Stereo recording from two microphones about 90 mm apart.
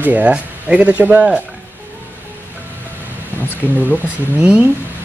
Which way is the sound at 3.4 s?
20° left (ahead or behind).